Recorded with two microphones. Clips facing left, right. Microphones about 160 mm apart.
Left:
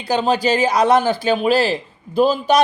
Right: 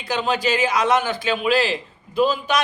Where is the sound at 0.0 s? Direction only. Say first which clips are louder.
Left 5 dB; 35° left (ahead or behind).